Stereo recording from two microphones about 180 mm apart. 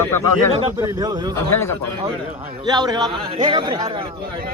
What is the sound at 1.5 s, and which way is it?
Speech, 15° left (ahead or behind).